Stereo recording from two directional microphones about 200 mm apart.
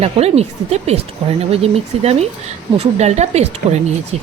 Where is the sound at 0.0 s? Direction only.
30° right (ahead or behind).